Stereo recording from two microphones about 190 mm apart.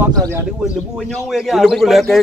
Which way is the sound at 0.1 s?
20° right (ahead or behind).